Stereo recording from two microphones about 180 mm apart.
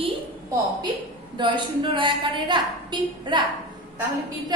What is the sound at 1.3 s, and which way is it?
A woman's voice, 25° right (ahead or behind).